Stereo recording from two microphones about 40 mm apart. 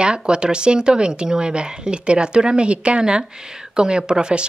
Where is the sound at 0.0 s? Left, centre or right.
Right.